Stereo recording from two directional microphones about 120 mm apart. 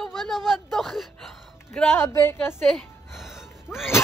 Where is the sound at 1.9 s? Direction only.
20° left (ahead or behind).